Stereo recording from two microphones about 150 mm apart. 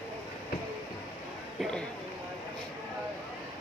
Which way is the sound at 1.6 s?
5° left (ahead or behind).